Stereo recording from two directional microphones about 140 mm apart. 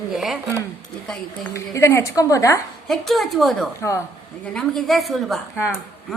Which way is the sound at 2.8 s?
Centre (ahead or behind).